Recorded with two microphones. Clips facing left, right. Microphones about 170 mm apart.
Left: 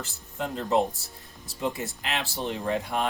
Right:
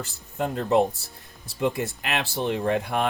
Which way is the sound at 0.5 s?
60° right (ahead or behind).